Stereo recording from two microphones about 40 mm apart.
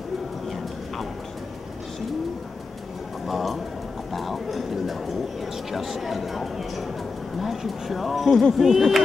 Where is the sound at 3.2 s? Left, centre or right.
Centre.